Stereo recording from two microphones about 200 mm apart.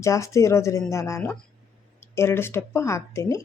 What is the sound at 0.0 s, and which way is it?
Speech, 15° left (ahead or behind).